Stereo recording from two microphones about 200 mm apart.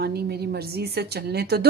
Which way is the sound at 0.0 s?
55° right (ahead or behind).